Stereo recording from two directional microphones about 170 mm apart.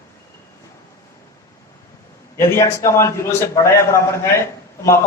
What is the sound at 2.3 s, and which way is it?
A man's voice, 15° left (ahead or behind).